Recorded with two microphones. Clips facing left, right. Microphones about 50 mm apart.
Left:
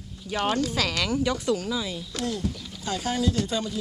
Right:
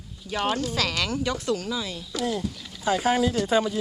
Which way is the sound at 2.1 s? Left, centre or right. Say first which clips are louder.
Right 3 dB; centre.